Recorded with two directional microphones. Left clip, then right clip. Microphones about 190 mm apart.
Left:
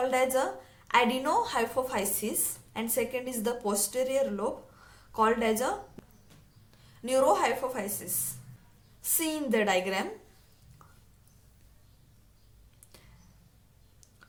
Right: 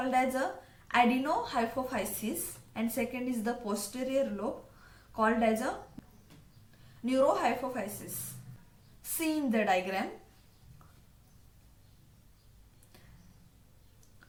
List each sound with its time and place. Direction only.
0.0 s a woman's voice: 55° left (ahead or behind)
6.0 s a sound: centre (ahead or behind)
7.0 s a woman's voice: 55° left (ahead or behind)
9.1 s speech: 50° left (ahead or behind)